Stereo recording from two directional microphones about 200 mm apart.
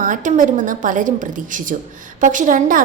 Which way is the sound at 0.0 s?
40° right (ahead or behind).